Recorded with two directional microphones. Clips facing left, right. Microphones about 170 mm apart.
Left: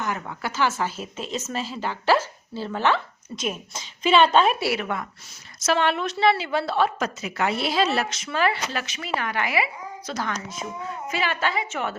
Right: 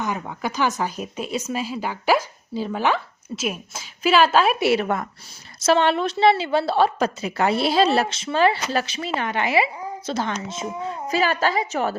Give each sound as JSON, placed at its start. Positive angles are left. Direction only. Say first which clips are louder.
{"t": 0.0, "sound": "speech", "louder": "right 3 dB", "side_deg": -15}
{"t": 4.8, "sound": "speech", "louder": "right 5 dB", "side_deg": -45}
{"t": 5.5, "sound": "a woman's voice", "louder": "right 4 dB", "side_deg": -30}
{"t": 11.1, "sound": "a woman's voice", "louder": "right 5 dB", "side_deg": -40}